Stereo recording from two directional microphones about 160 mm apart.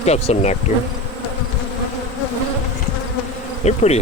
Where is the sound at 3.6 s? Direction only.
45° left (ahead or behind).